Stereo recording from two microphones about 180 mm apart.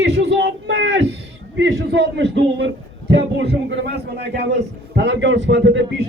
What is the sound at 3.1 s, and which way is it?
A man's voice, 65° right (ahead or behind).